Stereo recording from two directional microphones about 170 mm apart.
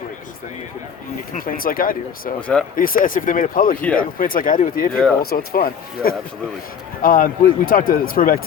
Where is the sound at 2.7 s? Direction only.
55° left (ahead or behind).